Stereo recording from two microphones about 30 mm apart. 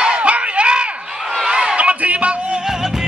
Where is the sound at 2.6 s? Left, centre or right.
Centre.